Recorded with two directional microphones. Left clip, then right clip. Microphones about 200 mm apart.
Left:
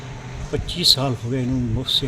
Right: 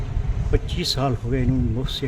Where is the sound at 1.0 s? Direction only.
Centre (ahead or behind).